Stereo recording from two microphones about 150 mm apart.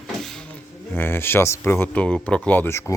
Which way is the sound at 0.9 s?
15° left (ahead or behind).